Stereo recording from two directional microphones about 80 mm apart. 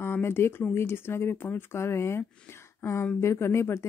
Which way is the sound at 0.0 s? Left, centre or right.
Left.